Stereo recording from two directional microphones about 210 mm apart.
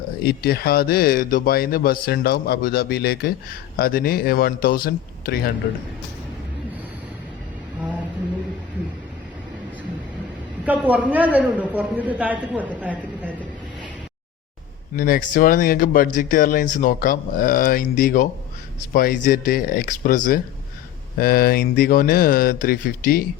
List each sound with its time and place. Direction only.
0.2 s speech: 50° left (ahead or behind)
10.7 s a man's voice: 5° right (ahead or behind)
14.9 s speech: 45° left (ahead or behind)